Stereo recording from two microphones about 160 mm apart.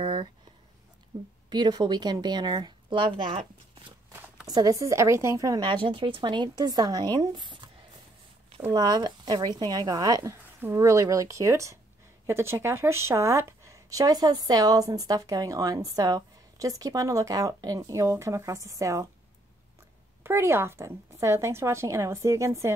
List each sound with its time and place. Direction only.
0.0 s a sound: 30° right (ahead or behind)
1.5 s speech: 25° right (ahead or behind)
4.5 s speech: 25° right (ahead or behind)
8.7 s speech: 25° right (ahead or behind)
20.2 s a woman's voice: 15° right (ahead or behind)